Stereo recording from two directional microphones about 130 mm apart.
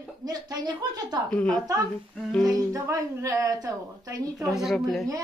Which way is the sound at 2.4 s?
25° right (ahead or behind).